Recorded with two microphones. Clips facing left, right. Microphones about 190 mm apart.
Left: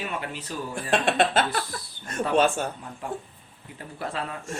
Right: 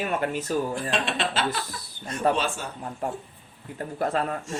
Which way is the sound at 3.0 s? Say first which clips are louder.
Right 1 dB; 45° right (ahead or behind).